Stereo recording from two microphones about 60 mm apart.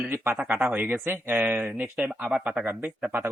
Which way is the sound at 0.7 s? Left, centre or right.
Right.